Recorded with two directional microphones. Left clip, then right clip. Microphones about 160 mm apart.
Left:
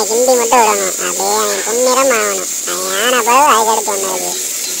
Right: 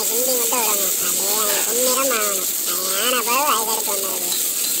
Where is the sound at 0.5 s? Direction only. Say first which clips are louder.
Left 12 dB; 90° left.